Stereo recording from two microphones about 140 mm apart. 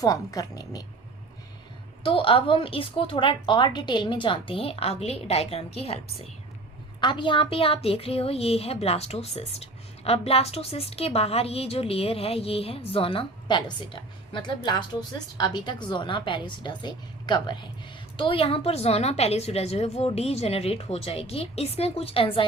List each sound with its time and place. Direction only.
0.0 s a woman's voice: 25° left (ahead or behind)
2.0 s a woman's voice: 40° left (ahead or behind)
7.0 s a woman's voice: 35° left (ahead or behind)